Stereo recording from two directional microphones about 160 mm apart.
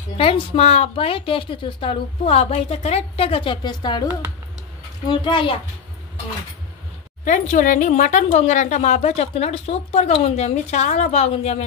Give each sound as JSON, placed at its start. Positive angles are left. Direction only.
{"t": 0.2, "sound": "a woman's voice", "side_deg": 35}
{"t": 7.2, "sound": "speech", "side_deg": 50}